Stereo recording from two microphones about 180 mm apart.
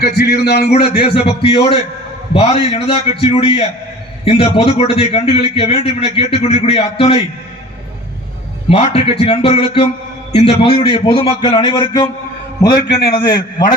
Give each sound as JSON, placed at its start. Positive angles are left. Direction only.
{"t": 0.0, "sound": "a man's voice", "side_deg": 65}
{"t": 1.0, "sound": "a man's voice", "side_deg": 35}
{"t": 8.7, "sound": "a man's voice", "side_deg": 35}
{"t": 12.7, "sound": "a man's voice", "side_deg": 65}
{"t": 13.1, "sound": "a man's voice", "side_deg": 25}